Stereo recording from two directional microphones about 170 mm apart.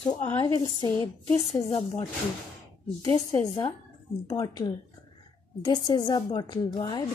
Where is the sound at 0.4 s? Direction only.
20° left (ahead or behind).